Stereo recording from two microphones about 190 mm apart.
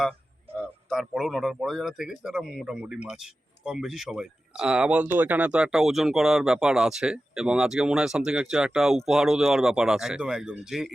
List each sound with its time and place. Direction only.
0.9 s speech: centre (ahead or behind)